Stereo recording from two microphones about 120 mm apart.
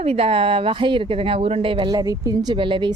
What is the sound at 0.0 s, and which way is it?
A woman's voice, 60° right (ahead or behind).